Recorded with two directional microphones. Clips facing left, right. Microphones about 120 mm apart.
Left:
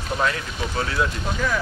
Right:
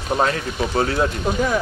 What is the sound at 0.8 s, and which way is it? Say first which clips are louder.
Speech: right 4 dB; 35° right (ahead or behind).